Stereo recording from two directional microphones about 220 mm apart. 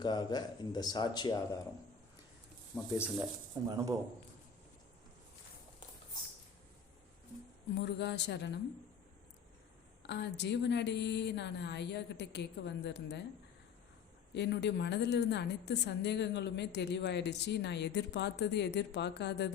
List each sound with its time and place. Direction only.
0.0 s speech: 20° left (ahead or behind)
2.7 s a man's voice: 5° right (ahead or behind)
7.8 s a woman's voice: 50° left (ahead or behind)
10.1 s a woman's voice: 50° left (ahead or behind)
14.3 s a woman's voice: 50° left (ahead or behind)